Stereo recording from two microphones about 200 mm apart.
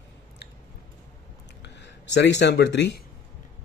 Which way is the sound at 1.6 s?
60° left (ahead or behind).